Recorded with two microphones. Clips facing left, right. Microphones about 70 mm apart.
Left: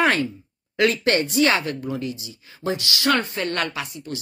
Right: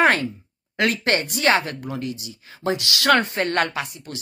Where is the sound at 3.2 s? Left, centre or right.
Right.